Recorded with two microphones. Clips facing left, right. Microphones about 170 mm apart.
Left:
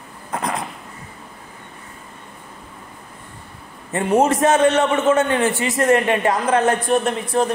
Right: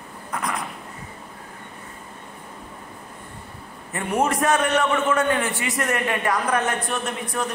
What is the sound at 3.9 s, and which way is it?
Speech, 25° left (ahead or behind).